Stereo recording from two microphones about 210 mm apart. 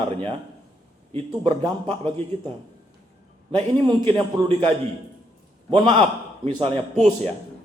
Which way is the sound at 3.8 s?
25° right (ahead or behind).